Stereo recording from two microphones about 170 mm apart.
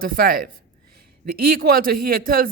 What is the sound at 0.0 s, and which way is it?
A man's voice, 60° right (ahead or behind).